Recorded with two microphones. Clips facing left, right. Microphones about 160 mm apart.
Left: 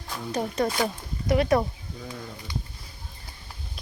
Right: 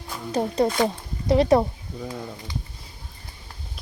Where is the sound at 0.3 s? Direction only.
25° right (ahead or behind).